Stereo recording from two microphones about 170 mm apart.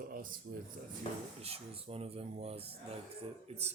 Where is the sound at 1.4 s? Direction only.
35° right (ahead or behind).